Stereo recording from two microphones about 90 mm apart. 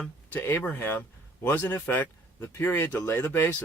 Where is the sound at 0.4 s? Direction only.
20° left (ahead or behind).